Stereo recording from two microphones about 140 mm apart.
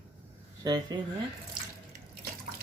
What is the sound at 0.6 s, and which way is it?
Speech, 30° right (ahead or behind).